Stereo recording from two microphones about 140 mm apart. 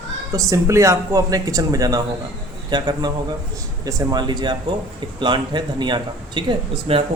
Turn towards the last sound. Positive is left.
turn(degrees=-40)  # may be behind; listen again after turning